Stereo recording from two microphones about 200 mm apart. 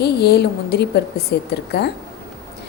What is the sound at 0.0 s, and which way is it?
A woman's voice, 55° left (ahead or behind).